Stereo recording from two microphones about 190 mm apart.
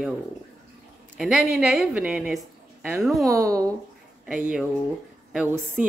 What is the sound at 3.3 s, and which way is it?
Speech, 15° right (ahead or behind).